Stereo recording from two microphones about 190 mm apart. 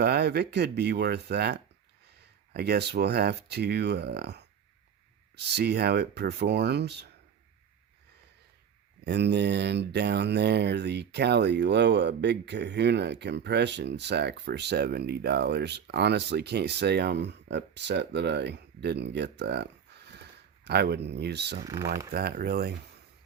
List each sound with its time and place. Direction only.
0.0 s speech: 60° right (ahead or behind)
9.0 s speech: 65° right (ahead or behind)
21.6 s speech: 15° right (ahead or behind)
22.1 s speech: 55° right (ahead or behind)